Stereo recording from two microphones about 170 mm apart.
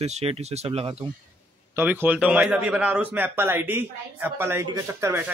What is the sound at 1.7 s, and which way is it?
Speech, 15° right (ahead or behind).